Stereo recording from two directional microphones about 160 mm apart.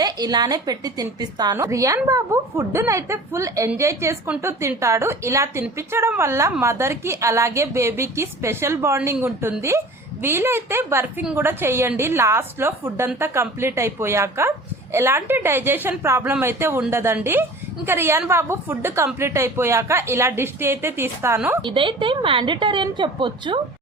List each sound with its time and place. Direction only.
0.0 s a woman's voice: 25° right (ahead or behind)
21.6 s a woman's voice: 30° right (ahead or behind)